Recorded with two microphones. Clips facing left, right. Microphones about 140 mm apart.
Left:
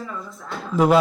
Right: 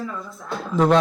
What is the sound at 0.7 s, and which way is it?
Speech, 5° left (ahead or behind).